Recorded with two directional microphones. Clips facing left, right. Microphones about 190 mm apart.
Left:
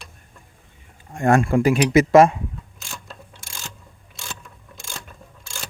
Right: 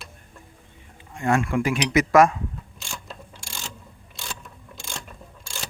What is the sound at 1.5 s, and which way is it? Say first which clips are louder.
Speech: left 6 dB; 35° left (ahead or behind).